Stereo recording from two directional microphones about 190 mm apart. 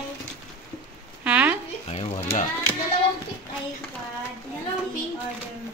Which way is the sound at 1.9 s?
35° left (ahead or behind).